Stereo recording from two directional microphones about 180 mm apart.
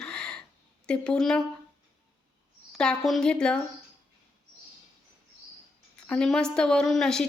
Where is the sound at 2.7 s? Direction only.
5° left (ahead or behind).